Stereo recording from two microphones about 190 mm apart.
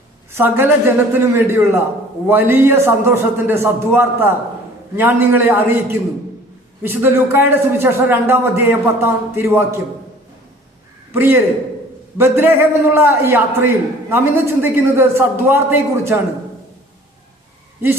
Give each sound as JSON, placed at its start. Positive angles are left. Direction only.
{"t": 0.3, "sound": "a man's voice", "side_deg": -10}
{"t": 6.8, "sound": "a man's voice", "side_deg": -10}
{"t": 11.1, "sound": "a man's voice", "side_deg": -10}